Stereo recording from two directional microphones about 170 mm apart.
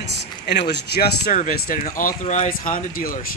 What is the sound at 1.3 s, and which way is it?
Speech, 55° left (ahead or behind).